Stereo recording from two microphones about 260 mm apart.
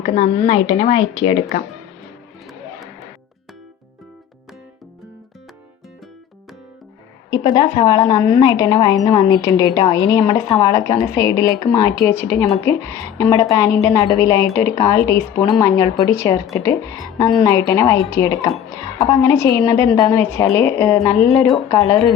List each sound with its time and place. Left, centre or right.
0.0 s speech: left
7.3 s a woman's voice: centre
21.8 s a woman's voice: centre